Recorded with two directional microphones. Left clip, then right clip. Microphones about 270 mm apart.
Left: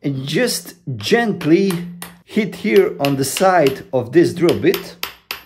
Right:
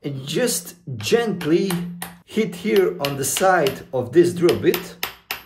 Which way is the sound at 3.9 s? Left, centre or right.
Left.